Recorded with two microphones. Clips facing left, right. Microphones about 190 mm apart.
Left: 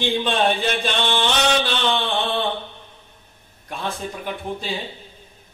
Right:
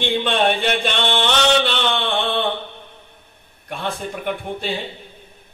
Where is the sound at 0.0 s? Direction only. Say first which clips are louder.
Right 1 dB; 60° right (ahead or behind).